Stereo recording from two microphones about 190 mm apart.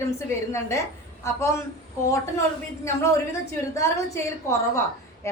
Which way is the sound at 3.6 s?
15° left (ahead or behind).